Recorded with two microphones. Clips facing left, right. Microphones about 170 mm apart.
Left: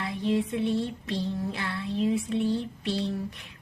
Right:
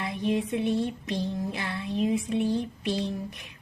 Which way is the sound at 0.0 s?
15° right (ahead or behind).